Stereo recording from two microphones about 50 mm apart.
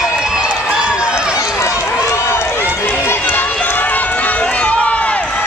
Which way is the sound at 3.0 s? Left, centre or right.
Left.